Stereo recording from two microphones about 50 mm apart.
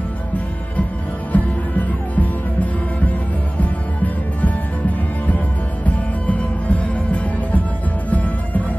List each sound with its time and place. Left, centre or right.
1.3 s music: left